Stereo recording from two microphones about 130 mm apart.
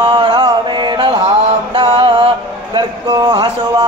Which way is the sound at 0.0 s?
35° right (ahead or behind).